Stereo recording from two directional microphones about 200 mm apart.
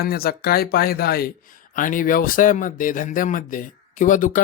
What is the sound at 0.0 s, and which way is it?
Speech, 50° left (ahead or behind).